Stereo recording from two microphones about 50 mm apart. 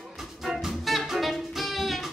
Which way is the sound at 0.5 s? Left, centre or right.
Centre.